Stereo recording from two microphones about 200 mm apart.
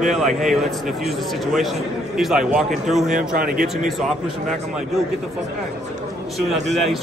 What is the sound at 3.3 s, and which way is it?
Speech, 45° right (ahead or behind).